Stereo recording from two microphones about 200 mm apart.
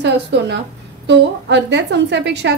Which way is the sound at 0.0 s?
60° right (ahead or behind).